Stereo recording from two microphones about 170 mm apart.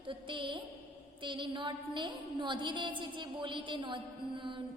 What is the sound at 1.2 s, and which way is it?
Music, 30° right (ahead or behind).